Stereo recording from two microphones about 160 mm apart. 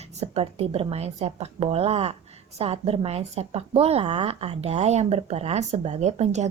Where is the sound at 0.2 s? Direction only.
40° right (ahead or behind).